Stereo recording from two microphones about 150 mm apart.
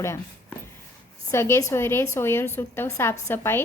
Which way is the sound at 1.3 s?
15° left (ahead or behind).